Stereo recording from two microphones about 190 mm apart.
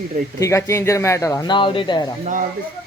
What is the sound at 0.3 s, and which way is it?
Speech, 15° left (ahead or behind).